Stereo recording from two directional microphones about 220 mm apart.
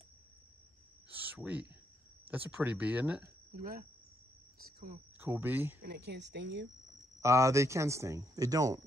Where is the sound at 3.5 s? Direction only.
40° right (ahead or behind).